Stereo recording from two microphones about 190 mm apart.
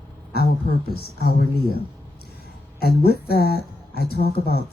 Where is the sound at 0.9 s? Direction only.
55° left (ahead or behind).